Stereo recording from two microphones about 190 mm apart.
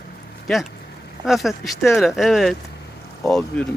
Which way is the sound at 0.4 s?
Centre (ahead or behind).